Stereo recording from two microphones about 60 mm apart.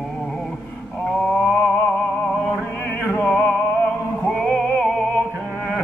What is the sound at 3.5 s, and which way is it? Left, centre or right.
Music, centre.